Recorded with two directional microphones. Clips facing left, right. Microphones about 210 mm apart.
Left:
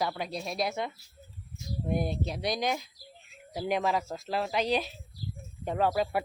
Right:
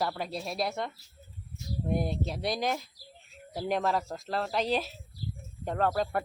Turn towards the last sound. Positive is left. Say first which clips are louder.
# left 1 dB
turn(degrees=5)  # may be behind; listen again after turning